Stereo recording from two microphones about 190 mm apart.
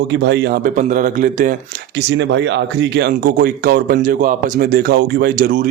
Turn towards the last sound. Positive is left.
turn(degrees=-45)  # may be behind; listen again after turning